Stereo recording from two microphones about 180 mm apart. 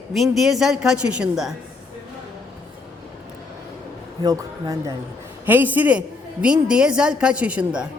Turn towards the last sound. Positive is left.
turn(degrees=-5)  # may be behind; listen again after turning